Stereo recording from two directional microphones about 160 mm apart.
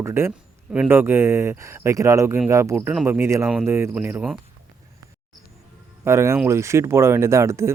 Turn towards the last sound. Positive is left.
turn(degrees=-15)  # may be behind; listen again after turning